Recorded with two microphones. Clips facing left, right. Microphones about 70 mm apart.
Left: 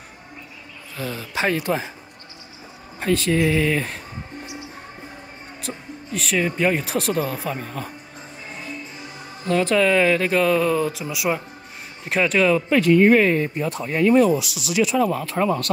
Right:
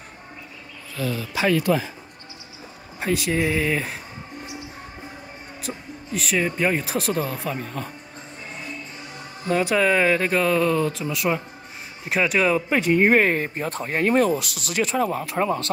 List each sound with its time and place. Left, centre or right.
0.9 s speech: left
3.0 s speech: centre
5.6 s speech: centre
9.5 s speech: centre; by 15.1 s right
15.1 s speech: centre